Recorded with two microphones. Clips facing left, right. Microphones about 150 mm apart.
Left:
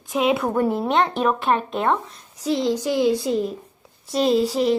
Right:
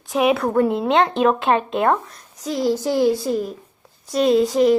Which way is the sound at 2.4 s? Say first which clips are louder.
Even; 30° left (ahead or behind).